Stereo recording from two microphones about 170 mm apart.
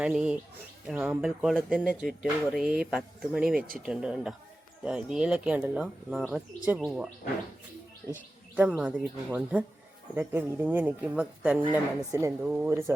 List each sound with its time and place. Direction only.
0.0 s speech: 5° right (ahead or behind)
8.1 s speech: 10° right (ahead or behind)
12.1 s speech: 15° right (ahead or behind)